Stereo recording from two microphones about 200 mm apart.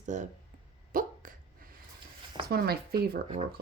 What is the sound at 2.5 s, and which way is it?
Speech, 50° right (ahead or behind).